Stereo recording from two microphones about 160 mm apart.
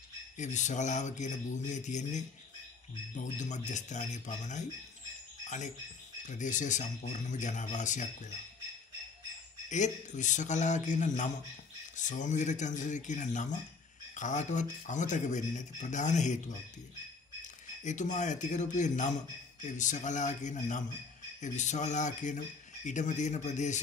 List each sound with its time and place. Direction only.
0.4 s speech: 50° left (ahead or behind)
6.2 s speech: 50° left (ahead or behind)
9.7 s speech: 50° left (ahead or behind)